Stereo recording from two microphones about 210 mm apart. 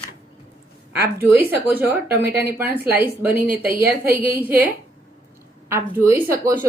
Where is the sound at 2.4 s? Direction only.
10° right (ahead or behind).